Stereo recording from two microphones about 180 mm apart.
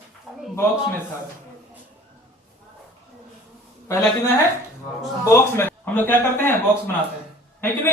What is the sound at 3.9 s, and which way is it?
A man's voice, 15° left (ahead or behind).